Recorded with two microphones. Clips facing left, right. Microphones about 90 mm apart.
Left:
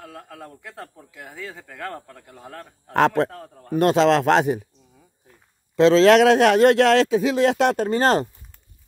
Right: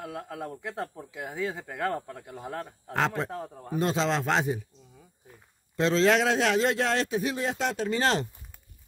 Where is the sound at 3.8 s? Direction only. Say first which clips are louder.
Left 10 dB; 65° left (ahead or behind).